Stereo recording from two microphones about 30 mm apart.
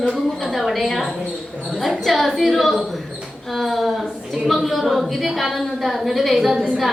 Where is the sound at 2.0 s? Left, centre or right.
Centre.